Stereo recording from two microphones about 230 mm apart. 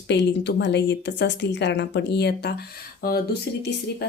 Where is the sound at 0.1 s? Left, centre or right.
Left.